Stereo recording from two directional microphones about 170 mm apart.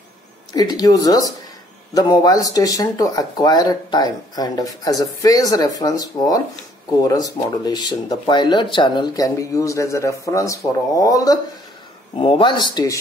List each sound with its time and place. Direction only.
0.5 s speech: 20° left (ahead or behind)